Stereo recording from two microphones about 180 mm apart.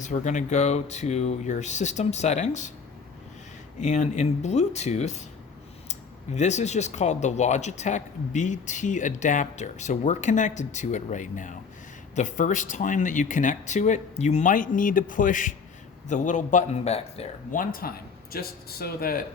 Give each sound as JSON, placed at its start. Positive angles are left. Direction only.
{"t": 0.0, "sound": "speech", "side_deg": 40}
{"t": 3.8, "sound": "speech", "side_deg": 40}